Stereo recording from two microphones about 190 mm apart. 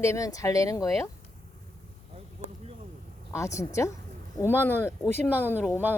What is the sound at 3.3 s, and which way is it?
Speech, 15° left (ahead or behind).